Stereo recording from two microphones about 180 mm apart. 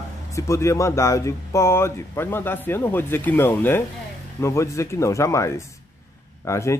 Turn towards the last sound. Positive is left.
turn(degrees=15)  # may be behind; listen again after turning